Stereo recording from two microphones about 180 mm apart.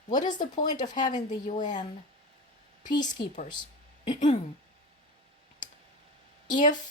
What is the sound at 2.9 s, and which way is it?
Speech, 25° left (ahead or behind).